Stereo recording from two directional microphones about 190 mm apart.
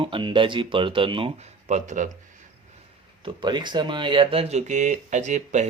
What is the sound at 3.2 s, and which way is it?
Speech, 25° right (ahead or behind).